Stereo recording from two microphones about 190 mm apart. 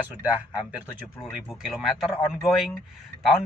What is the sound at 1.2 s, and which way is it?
Speech, centre (ahead or behind).